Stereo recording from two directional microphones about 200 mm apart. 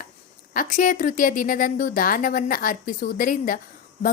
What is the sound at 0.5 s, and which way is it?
A woman's voice, 40° left (ahead or behind).